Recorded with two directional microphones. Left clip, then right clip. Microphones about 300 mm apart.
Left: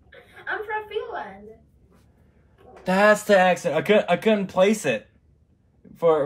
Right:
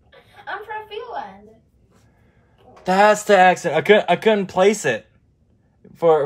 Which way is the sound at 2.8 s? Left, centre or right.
Centre.